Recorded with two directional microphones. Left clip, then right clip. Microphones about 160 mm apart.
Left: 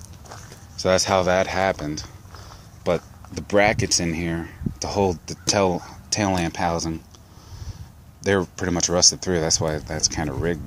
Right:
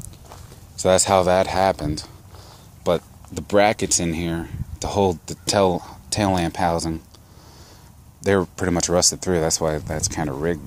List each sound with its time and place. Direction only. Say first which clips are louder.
0.8 s speech: right 3 dB; 30° right (ahead or behind)
8.2 s speech: right 2 dB; 30° right (ahead or behind)